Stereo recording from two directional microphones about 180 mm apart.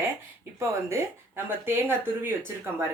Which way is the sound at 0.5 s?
15° right (ahead or behind).